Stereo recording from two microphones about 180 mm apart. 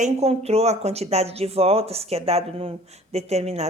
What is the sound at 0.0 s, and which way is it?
Speech, 35° right (ahead or behind).